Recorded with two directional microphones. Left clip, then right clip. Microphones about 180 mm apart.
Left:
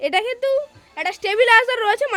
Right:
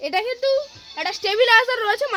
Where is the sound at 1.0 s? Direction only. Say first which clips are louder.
Left 1 dB; 15° left (ahead or behind).